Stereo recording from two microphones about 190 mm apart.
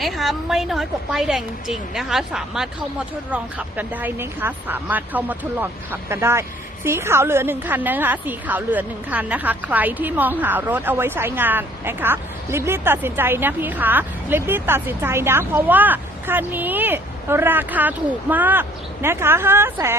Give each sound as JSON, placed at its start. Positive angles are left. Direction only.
{"t": 0.0, "sound": "a woman's voice", "side_deg": 0}